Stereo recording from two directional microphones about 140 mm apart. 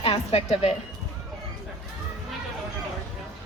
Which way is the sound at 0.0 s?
45° left (ahead or behind).